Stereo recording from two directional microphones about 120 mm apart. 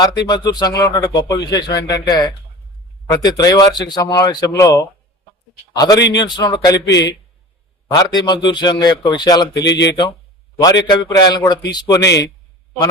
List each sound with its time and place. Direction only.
0.0 s speech: 35° left (ahead or behind)
10.6 s speech: 35° left (ahead or behind)